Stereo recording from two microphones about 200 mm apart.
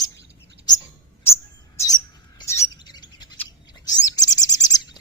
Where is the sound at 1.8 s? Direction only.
20° left (ahead or behind).